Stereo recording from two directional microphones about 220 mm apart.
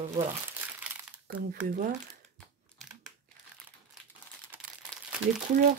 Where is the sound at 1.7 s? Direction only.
40° right (ahead or behind).